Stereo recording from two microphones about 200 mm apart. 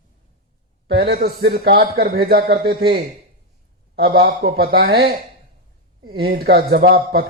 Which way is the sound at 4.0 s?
50° right (ahead or behind).